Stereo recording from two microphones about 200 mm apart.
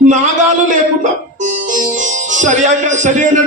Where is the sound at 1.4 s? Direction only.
40° right (ahead or behind).